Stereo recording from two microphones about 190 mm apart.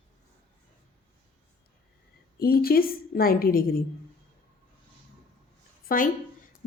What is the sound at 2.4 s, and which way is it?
Speech, 50° left (ahead or behind).